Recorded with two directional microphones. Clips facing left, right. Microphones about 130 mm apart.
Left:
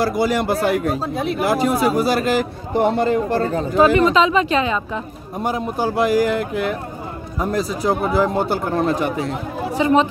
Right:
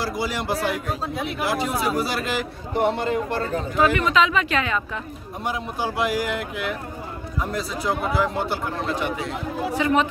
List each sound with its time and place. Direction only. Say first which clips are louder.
0.0 s speech: left 8 dB; 55° left (ahead or behind); by 5.0 s 25° left (ahead or behind)
5.4 s a man's voice: left 6 dB; 45° left (ahead or behind)
9.8 s speech: left 5 dB; 25° left (ahead or behind)